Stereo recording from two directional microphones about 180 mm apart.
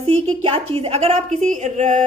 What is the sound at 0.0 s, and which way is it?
A woman's voice, 30° right (ahead or behind).